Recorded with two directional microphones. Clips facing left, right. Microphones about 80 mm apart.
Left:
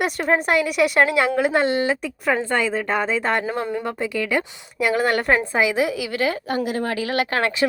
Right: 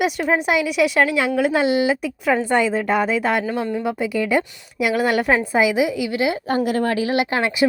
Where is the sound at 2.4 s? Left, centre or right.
Centre.